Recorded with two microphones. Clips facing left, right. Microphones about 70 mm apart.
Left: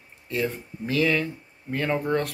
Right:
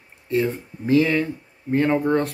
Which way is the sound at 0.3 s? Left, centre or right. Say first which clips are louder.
Right 6 dB; right.